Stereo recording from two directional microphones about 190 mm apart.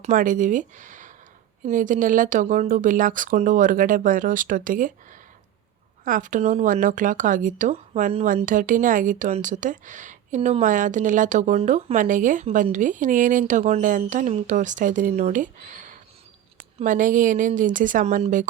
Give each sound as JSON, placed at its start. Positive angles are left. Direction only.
{"t": 0.0, "sound": "speech", "side_deg": -45}
{"t": 6.1, "sound": "speech", "side_deg": -45}